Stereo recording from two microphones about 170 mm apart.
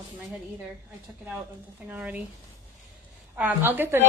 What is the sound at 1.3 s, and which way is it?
Speech, 10° right (ahead or behind).